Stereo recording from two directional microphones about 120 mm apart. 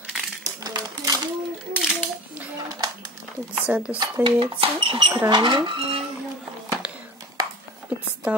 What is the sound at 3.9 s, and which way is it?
Speech, 40° right (ahead or behind).